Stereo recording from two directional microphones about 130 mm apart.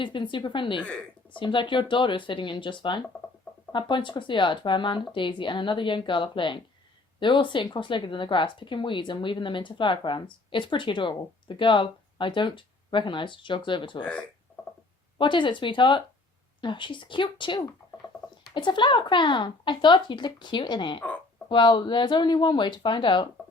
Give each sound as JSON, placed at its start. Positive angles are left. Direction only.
{"t": 0.0, "sound": "speech", "side_deg": 40}
{"t": 14.0, "sound": "speech", "side_deg": 5}
{"t": 15.2, "sound": "speech", "side_deg": 40}